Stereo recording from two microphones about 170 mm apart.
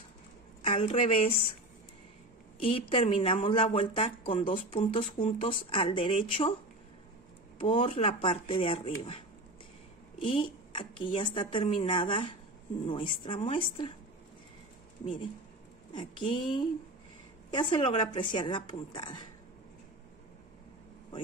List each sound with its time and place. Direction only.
0.6 s a woman's voice: 35° left (ahead or behind)
2.6 s speech: 35° left (ahead or behind)
7.5 s speech: 30° left (ahead or behind)
10.2 s speech: 30° left (ahead or behind)
15.9 s a woman's voice: 25° left (ahead or behind)